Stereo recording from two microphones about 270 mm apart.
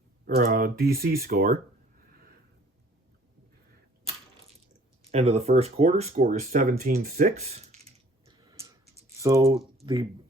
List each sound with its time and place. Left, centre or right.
0.3 s speech: right
5.0 s speech: right
8.2 s a sound: centre
9.2 s speech: centre